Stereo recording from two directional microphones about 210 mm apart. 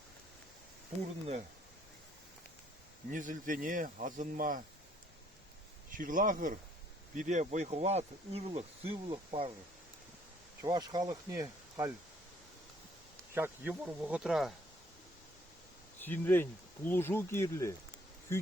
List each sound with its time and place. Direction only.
3.1 s speech: 40° right (ahead or behind)
5.9 s speech: 40° right (ahead or behind)
10.6 s speech: 20° right (ahead or behind)
13.3 s speech: 10° right (ahead or behind)
16.0 s speech: 10° left (ahead or behind)